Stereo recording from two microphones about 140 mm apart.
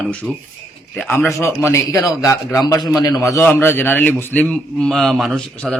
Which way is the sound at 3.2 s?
25° left (ahead or behind).